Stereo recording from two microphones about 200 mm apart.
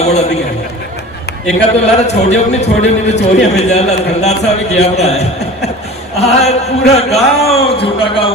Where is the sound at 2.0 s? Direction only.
35° left (ahead or behind).